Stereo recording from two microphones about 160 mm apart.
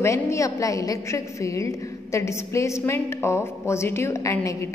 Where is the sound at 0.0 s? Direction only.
20° left (ahead or behind).